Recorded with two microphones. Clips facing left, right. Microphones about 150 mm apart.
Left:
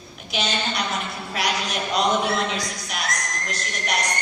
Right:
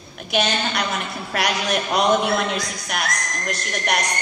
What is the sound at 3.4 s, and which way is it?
Speech, 55° right (ahead or behind).